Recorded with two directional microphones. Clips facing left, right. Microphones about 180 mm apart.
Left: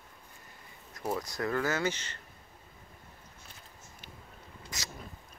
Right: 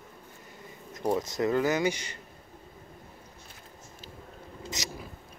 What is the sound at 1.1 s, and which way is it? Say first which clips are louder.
Speech: right 6 dB; 20° right (ahead or behind).